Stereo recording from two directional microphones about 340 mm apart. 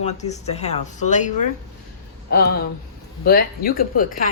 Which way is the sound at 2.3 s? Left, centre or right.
Left.